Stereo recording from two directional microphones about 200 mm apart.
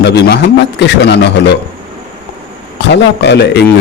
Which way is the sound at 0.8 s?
60° left (ahead or behind).